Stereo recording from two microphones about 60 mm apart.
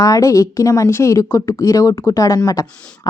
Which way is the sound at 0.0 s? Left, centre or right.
Left.